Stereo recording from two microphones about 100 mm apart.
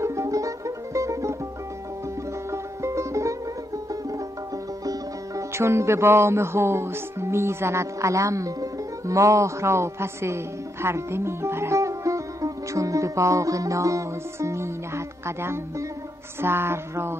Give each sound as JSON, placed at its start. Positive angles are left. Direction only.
{"t": 0.0, "sound": "music", "side_deg": -30}
{"t": 2.5, "sound": "music", "side_deg": -30}
{"t": 4.8, "sound": "speech", "side_deg": -30}